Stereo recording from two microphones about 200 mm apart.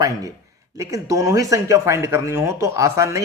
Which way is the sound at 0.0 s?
15° right (ahead or behind).